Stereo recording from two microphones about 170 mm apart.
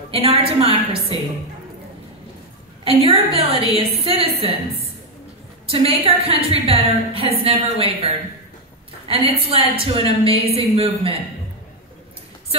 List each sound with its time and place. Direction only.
0.1 s a woman's voice: 35° right (ahead or behind)
2.8 s a woman's voice: 35° right (ahead or behind)
5.7 s a woman's voice: 35° right (ahead or behind)